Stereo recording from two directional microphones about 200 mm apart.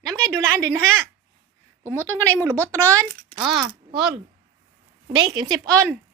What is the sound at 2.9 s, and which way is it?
Speech, 15° right (ahead or behind).